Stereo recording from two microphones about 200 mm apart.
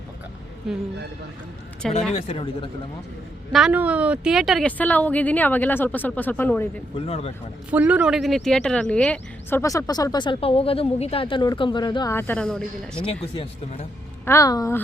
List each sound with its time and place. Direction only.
2.1 s speech: 30° left (ahead or behind)
3.5 s speech: 5° right (ahead or behind)
7.1 s speech: 30° left (ahead or behind)
7.7 s speech: 5° right (ahead or behind)
13.3 s speech: 30° left (ahead or behind)
14.3 s speech: 15° left (ahead or behind)